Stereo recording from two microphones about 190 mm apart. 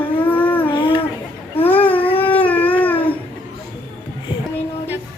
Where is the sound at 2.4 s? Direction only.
10° left (ahead or behind).